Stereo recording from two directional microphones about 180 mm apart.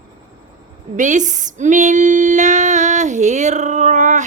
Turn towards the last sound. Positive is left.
turn(degrees=-40)  # may be behind; listen again after turning